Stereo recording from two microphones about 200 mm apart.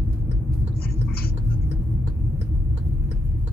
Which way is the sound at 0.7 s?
50° left (ahead or behind).